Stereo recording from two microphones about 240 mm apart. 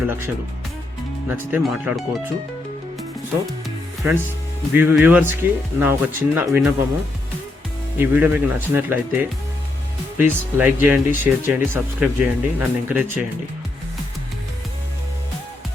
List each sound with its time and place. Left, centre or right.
1.3 s speech: centre
4.7 s speech: centre
7.9 s speech: centre